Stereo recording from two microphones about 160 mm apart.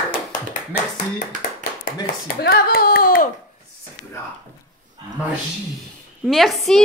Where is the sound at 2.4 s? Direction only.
75° left (ahead or behind).